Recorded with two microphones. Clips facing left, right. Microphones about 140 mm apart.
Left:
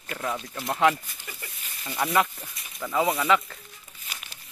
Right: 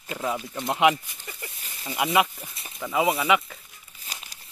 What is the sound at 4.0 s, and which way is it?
Crumpling, 35° right (ahead or behind).